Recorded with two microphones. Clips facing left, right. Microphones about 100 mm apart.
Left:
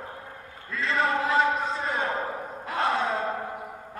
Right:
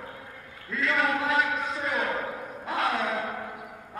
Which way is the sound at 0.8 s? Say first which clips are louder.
Left 1 dB; 30° left (ahead or behind).